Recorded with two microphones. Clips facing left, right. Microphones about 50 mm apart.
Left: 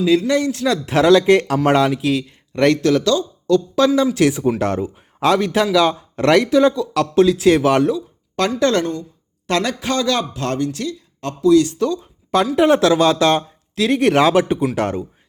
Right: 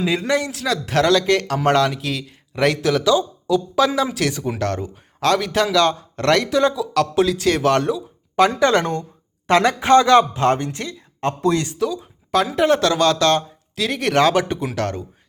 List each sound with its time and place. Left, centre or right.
0.0 s a man's voice: right
0.5 s a man's voice: centre
4.2 s speech: centre
6.5 s a man's voice: centre
8.5 s a woman's voice: centre
8.8 s speech: right
9.5 s speech: right
11.7 s speech: centre
13.7 s speech: centre
14.8 s speech: centre